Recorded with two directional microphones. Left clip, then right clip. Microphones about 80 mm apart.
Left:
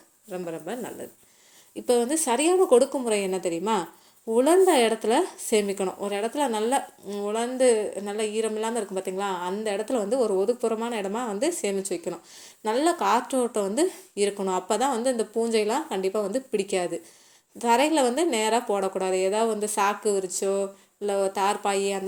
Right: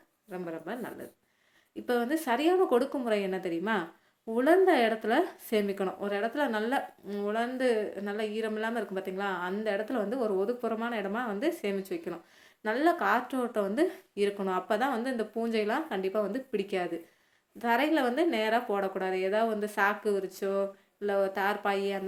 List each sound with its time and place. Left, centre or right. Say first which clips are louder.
0.4 s speech: left 3 dB; left
1.7 s speech: left 6 dB; left